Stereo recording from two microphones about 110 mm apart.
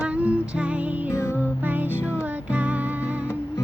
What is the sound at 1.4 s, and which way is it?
Music, 15° right (ahead or behind).